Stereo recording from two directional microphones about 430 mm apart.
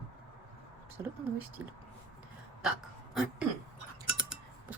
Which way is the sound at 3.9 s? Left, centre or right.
Centre.